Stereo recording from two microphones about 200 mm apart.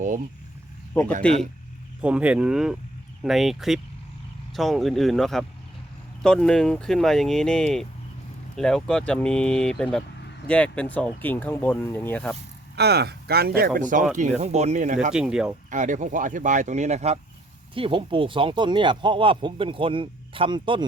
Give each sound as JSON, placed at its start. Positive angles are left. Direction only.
{"t": 1.2, "sound": "speech", "side_deg": 5}
{"t": 2.0, "sound": "speech", "side_deg": -5}
{"t": 12.7, "sound": "speech", "side_deg": -55}
{"t": 15.1, "sound": "speech", "side_deg": -5}
{"t": 15.7, "sound": "speech", "side_deg": -40}